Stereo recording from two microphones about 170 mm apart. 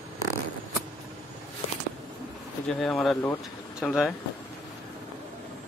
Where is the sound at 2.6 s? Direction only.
Centre (ahead or behind).